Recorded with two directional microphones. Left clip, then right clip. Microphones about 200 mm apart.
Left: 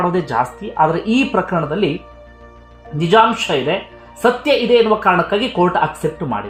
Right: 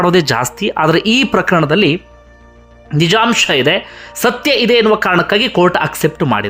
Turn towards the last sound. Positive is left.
turn(degrees=-30)  # may be behind; listen again after turning